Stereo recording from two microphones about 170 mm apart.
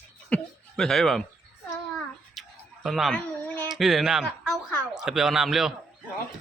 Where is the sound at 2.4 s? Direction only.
Centre (ahead or behind).